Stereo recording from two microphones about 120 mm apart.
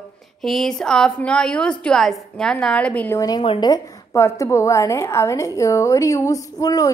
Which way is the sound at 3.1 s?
30° left (ahead or behind).